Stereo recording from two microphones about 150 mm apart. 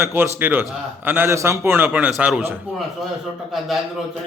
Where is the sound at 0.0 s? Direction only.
15° right (ahead or behind).